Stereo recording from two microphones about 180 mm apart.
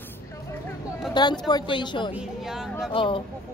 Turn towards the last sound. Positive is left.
turn(degrees=30)  # may be behind; listen again after turning